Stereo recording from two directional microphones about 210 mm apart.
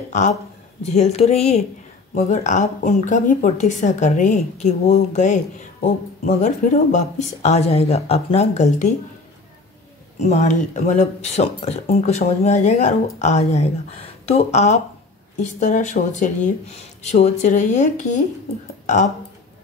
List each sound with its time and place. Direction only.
0.1 s speech: 35° left (ahead or behind)
10.2 s speech: 35° left (ahead or behind)